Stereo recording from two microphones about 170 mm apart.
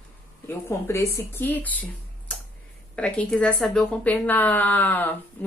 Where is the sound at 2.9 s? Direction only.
5° left (ahead or behind).